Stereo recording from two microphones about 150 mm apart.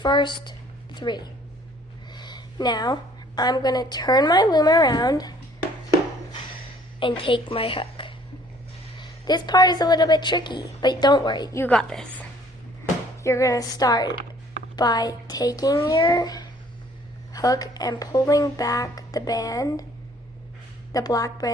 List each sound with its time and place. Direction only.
0.0 s a woman's voice: 30° left (ahead or behind)
7.0 s a woman's voice: 35° left (ahead or behind)
11.6 s a woman's voice: 5° left (ahead or behind)
13.2 s a woman's voice: 20° left (ahead or behind)
20.9 s a woman's voice: 25° left (ahead or behind)